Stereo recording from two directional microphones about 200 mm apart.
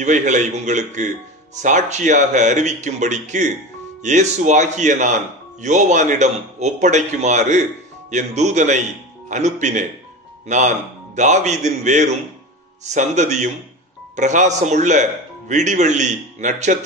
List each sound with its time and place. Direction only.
0.0 s speech: 35° right (ahead or behind)